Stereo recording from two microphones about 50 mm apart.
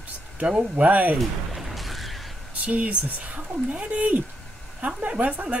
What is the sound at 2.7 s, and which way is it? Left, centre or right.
Speech, right.